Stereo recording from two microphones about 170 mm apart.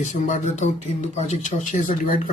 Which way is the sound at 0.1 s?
45° left (ahead or behind).